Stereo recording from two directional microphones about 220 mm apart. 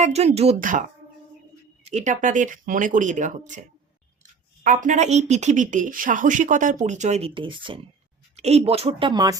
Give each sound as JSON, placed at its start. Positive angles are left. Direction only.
{"t": 0.0, "sound": "speech", "side_deg": -30}